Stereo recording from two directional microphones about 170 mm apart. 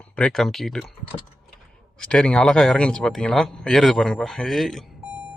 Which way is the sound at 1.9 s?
5° left (ahead or behind).